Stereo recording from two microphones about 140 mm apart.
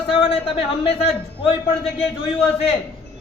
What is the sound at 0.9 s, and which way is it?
Speech, 45° left (ahead or behind).